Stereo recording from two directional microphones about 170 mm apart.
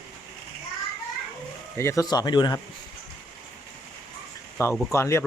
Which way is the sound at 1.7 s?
15° left (ahead or behind).